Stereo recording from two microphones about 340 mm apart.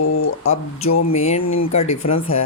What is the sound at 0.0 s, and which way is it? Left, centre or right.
Speech, left.